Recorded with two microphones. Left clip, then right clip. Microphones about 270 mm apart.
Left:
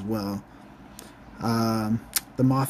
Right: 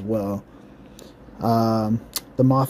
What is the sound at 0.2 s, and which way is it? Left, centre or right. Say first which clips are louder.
Speech: right 5 dB; centre.